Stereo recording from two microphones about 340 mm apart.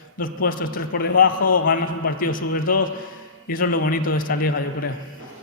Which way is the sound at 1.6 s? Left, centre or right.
Left.